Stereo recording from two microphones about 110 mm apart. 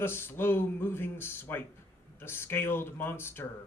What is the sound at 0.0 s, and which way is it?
Speech, 20° left (ahead or behind).